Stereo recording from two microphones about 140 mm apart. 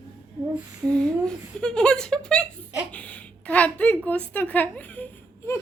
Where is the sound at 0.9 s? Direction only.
10° left (ahead or behind).